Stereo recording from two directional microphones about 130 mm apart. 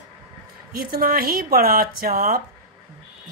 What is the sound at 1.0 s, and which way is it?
Speech, 90° right.